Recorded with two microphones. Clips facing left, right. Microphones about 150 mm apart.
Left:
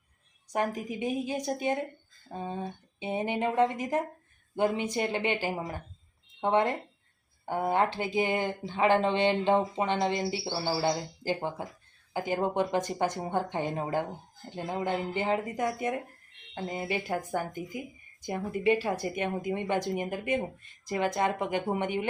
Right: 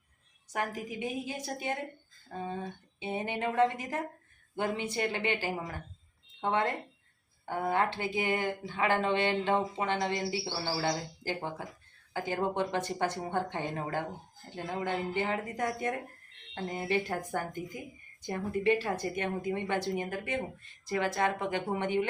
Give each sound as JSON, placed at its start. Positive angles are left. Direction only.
{"t": 0.5, "sound": "speech", "side_deg": 20}